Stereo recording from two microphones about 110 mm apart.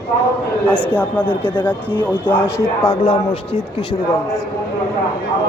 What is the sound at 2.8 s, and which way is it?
Speech, 45° left (ahead or behind).